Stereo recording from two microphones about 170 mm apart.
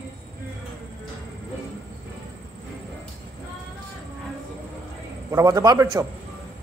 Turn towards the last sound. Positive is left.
turn(degrees=-20)  # may be behind; listen again after turning